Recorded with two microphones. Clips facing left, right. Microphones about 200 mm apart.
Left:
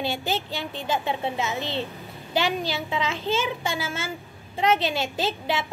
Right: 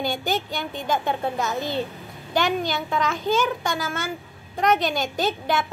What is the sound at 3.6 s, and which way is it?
Speech, 5° left (ahead or behind).